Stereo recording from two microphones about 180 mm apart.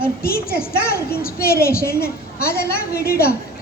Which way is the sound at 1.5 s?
15° left (ahead or behind).